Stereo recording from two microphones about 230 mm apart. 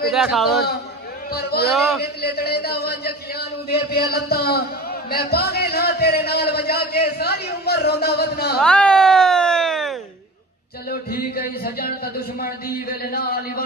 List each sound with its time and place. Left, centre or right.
0.1 s a man's voice: centre
1.3 s a man's voice: left
1.7 s a man's voice: centre
2.0 s a man's voice: left
8.5 s a sound: centre
10.9 s speech: left